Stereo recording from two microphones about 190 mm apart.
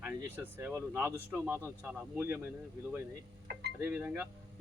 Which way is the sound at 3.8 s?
10° right (ahead or behind).